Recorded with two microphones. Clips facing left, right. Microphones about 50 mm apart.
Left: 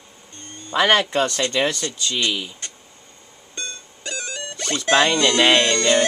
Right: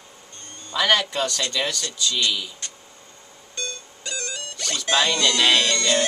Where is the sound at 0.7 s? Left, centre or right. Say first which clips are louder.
Left 4 dB; left.